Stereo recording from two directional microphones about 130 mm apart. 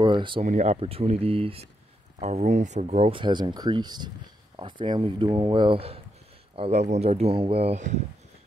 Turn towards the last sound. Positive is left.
turn(degrees=-60)  # may be behind; listen again after turning